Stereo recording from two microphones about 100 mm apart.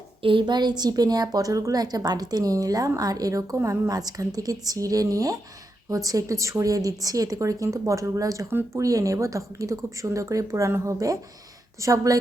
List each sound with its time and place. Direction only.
0.2 s a woman's voice: 60° right (ahead or behind); by 12.1 s 35° right (ahead or behind)